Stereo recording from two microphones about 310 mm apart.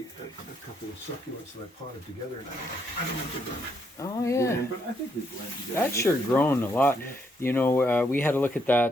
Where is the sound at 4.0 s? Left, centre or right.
Centre.